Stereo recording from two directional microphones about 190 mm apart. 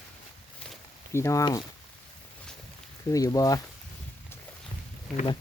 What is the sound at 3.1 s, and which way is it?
Speech, 20° left (ahead or behind).